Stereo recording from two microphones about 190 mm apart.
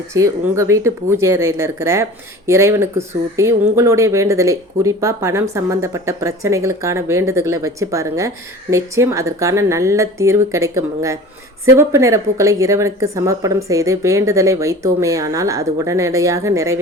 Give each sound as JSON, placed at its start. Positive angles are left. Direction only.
{"t": 0.1, "sound": "speech", "side_deg": -15}